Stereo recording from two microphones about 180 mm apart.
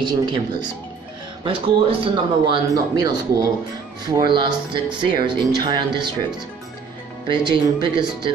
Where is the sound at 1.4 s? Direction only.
30° right (ahead or behind).